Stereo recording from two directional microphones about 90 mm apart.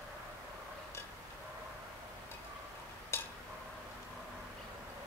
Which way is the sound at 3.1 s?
30° left (ahead or behind).